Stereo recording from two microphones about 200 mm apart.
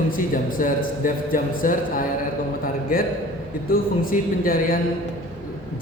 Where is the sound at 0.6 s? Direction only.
45° left (ahead or behind).